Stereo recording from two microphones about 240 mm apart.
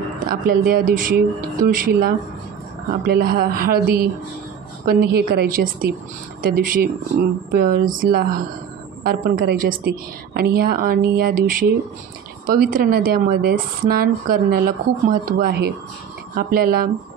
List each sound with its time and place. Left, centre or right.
0.3 s a woman's voice: right
4.8 s a woman's voice: right